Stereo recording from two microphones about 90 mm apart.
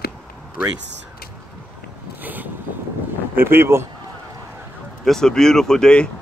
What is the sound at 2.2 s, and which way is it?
Vehicle, 20° right (ahead or behind).